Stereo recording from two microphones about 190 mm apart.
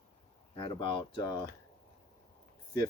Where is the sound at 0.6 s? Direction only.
25° left (ahead or behind).